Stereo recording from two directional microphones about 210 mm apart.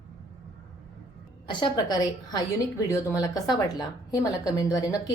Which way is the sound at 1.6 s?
20° left (ahead or behind).